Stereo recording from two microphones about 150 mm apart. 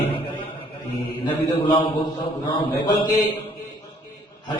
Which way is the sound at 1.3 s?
35° left (ahead or behind).